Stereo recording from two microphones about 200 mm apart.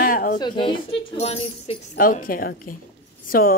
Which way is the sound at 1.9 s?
45° left (ahead or behind).